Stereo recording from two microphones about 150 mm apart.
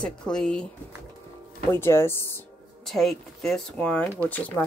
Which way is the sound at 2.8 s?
Centre (ahead or behind).